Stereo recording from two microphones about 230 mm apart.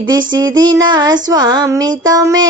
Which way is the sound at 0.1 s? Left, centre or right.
Centre.